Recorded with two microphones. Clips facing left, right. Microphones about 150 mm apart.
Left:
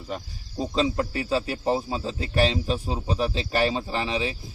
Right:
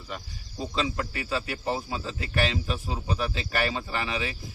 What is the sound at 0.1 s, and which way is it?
Speech, 35° left (ahead or behind).